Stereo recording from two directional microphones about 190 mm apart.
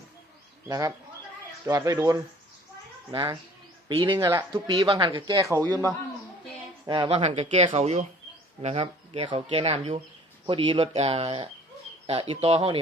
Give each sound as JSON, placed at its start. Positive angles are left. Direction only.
{"t": 0.7, "sound": "speech", "side_deg": -15}
{"t": 4.1, "sound": "speech", "side_deg": -15}
{"t": 7.2, "sound": "speech", "side_deg": -35}